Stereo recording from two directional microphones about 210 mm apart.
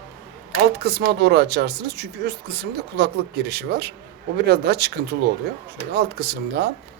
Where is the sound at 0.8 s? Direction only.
50° right (ahead or behind).